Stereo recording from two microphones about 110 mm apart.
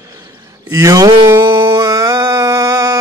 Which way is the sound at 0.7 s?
30° right (ahead or behind).